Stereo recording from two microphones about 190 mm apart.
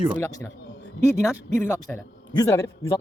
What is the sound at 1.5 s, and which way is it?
A man's voice, 15° left (ahead or behind).